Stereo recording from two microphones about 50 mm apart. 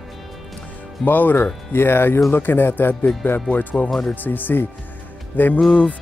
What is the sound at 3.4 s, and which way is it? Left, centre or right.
Speech, left.